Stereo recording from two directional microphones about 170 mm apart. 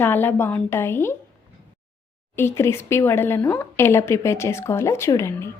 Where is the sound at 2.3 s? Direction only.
15° left (ahead or behind).